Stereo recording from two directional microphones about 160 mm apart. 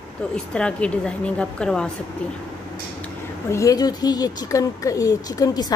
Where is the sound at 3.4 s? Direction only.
20° left (ahead or behind).